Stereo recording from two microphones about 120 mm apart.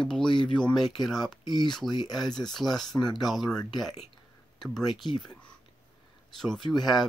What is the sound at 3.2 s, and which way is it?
Speech, centre (ahead or behind).